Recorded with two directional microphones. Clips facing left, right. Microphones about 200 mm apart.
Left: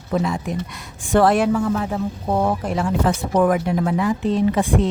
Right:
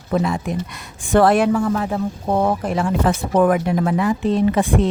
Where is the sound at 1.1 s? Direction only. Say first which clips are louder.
Right 2 dB; 60° right (ahead or behind).